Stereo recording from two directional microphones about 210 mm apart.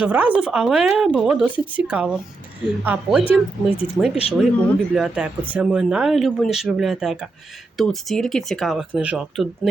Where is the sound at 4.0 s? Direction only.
5° left (ahead or behind).